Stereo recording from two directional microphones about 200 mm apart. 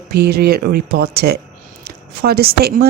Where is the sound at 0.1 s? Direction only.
50° right (ahead or behind).